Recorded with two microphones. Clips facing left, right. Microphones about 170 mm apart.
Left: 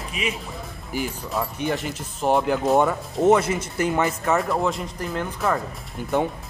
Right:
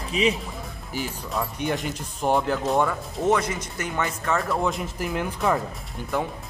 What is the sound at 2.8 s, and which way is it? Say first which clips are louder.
Speech: left 4 dB; 25° left (ahead or behind).